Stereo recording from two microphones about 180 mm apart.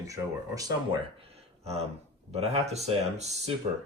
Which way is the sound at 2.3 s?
35° right (ahead or behind).